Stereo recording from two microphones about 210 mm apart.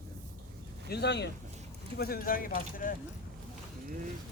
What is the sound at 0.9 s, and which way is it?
Speech, 55° left (ahead or behind).